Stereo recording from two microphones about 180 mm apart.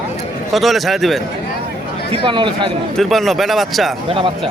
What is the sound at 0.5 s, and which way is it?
Speech, centre (ahead or behind).